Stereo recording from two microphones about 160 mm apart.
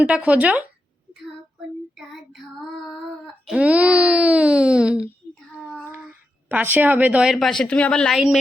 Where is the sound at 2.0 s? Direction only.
Centre (ahead or behind).